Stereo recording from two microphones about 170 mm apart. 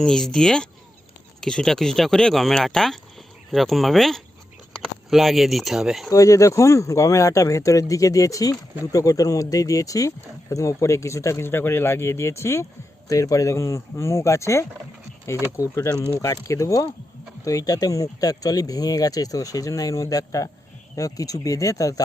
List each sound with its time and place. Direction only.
0.0 s speech: 5° left (ahead or behind)
6.1 s speech: 20° left (ahead or behind)